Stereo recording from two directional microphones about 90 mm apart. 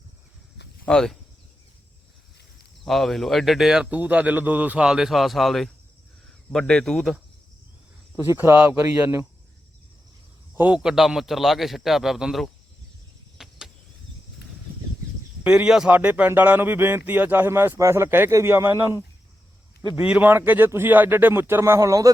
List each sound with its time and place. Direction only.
0.9 s speech: 5° left (ahead or behind)
2.8 s a man's voice: 5° left (ahead or behind)
3.9 s a man's voice: 15° right (ahead or behind); by 7.2 s 5° left (ahead or behind)
8.1 s speech: 25° right (ahead or behind)
10.5 s a man's voice: 20° right (ahead or behind)
10.8 s a man's voice: 5° right (ahead or behind)
13.4 s cricket: 5° right (ahead or behind)
15.4 s a man's voice: 10° right (ahead or behind); by 18.9 s 25° right (ahead or behind)
20.0 s speech: 15° right (ahead or behind); by 22.1 s 40° right (ahead or behind)